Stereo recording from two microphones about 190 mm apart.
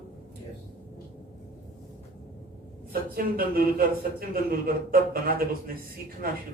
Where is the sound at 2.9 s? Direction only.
50° right (ahead or behind).